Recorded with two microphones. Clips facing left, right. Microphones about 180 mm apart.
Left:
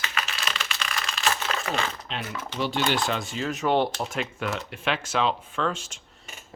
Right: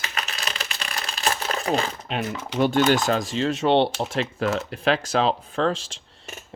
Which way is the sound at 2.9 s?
40° right (ahead or behind).